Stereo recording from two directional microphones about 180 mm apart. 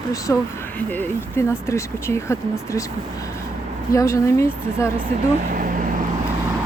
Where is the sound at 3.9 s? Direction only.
15° left (ahead or behind).